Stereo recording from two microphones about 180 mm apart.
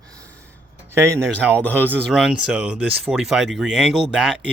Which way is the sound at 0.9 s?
15° right (ahead or behind).